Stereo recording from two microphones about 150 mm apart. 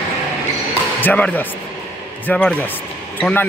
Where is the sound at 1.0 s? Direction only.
10° left (ahead or behind).